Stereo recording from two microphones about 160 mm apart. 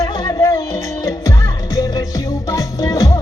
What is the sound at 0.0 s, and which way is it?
Music, 25° left (ahead or behind).